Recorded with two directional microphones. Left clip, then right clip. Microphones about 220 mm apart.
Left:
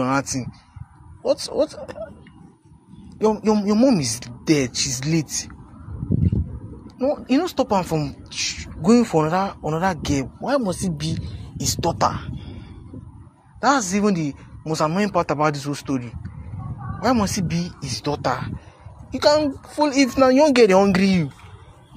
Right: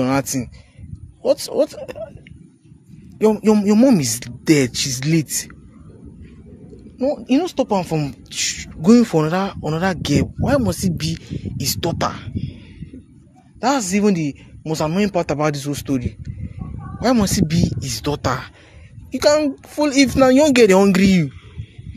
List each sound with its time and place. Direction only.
0.0 s speech: 35° right (ahead or behind)
3.2 s speech: 35° right (ahead or behind)
7.0 s speech: 30° right (ahead or behind)
13.6 s speech: 30° right (ahead or behind)